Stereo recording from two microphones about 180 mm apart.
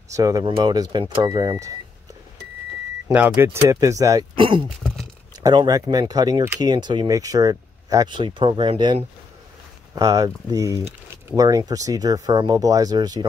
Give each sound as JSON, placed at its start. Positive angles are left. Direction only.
{"t": 0.1, "sound": "speech", "side_deg": -20}
{"t": 3.1, "sound": "speech", "side_deg": -10}
{"t": 4.6, "sound": "a sound", "side_deg": 0}
{"t": 5.4, "sound": "speech", "side_deg": -20}